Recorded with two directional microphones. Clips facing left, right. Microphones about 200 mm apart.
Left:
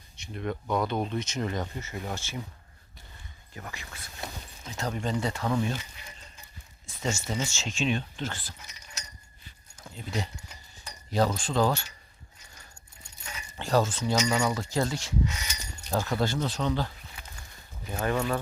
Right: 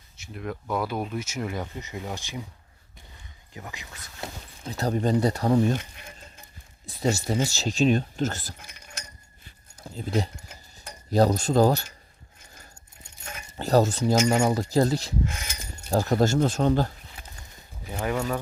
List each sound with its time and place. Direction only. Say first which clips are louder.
0.2 s speech: left 1 dB; 5° right (ahead or behind)
3.5 s speech: right 1 dB; 15° right (ahead or behind)
4.6 s speech: right 7 dB; 35° right (ahead or behind)
5.7 s insect: right 6 dB; 55° right (ahead or behind)
6.8 s speech: right 6 dB; 35° right (ahead or behind); by 9.0 s 55° right (ahead or behind)
9.8 s speech: right 7 dB; 40° right (ahead or behind)
10.3 s cutlery: right 2 dB; 55° right (ahead or behind)
11.1 s speech: right 6 dB; 40° right (ahead or behind)
13.2 s a sound: right 5 dB; 45° right (ahead or behind)
14.1 s speech: right 5 dB; 45° right (ahead or behind)
15.2 s mechanisms: right 1 dB; 50° right (ahead or behind)
15.9 s speech: right 6 dB; 40° right (ahead or behind)
17.9 s speech: even; 10° right (ahead or behind)